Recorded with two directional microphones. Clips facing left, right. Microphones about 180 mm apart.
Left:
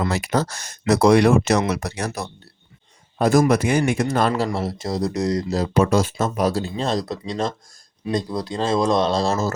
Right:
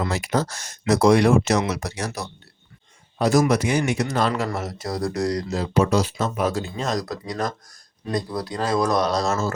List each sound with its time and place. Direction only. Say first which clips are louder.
0.0 s speech: left 2 dB; 65° left (ahead or behind)
4.4 s speech: left 3 dB; 30° left (ahead or behind)
5.5 s speech: left 2 dB; 50° left (ahead or behind); by 9.5 s 30° left (ahead or behind)